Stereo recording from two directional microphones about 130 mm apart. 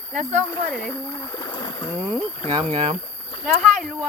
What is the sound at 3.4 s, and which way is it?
Speech, 5° right (ahead or behind).